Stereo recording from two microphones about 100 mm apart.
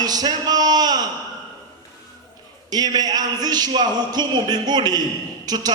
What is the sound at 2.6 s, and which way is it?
A man's voice, 40° right (ahead or behind).